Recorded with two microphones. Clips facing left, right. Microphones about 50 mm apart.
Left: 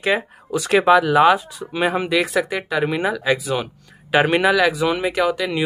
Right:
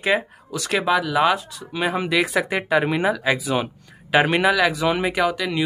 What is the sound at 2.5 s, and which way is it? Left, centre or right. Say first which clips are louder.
Speech: right 2 dB; centre.